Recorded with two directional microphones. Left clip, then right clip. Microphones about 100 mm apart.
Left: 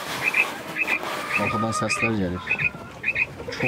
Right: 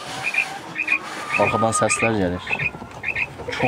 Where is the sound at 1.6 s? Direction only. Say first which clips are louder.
Right 5 dB; 30° right (ahead or behind).